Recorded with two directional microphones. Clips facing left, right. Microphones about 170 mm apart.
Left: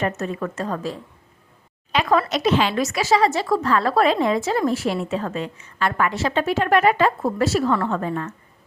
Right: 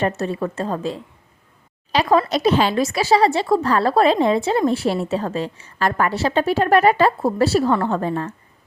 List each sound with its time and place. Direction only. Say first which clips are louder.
0.0 s a woman's voice: right 3 dB; 30° right (ahead or behind)